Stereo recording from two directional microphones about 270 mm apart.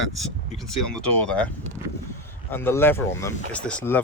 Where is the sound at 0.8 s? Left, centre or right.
Left.